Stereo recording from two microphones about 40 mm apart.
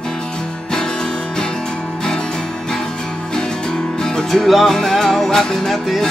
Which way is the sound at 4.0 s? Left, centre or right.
Centre.